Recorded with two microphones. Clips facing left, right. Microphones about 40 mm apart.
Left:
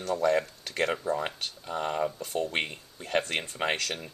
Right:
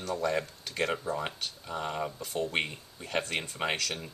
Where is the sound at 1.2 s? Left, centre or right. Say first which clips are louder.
Left 2 dB; centre.